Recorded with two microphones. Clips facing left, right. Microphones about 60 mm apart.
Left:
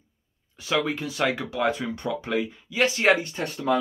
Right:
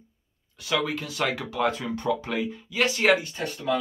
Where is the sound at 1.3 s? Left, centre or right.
Centre.